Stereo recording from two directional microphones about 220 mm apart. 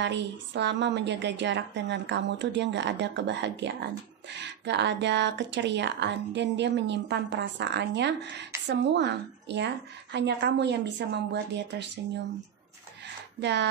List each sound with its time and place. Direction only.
0.0 s a woman's voice: 55° right (ahead or behind)
13.4 s a woman's voice: 50° right (ahead or behind)